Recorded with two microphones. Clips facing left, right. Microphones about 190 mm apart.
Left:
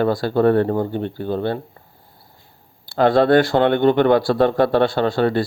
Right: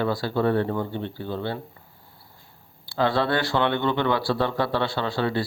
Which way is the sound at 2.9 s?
50° left (ahead or behind).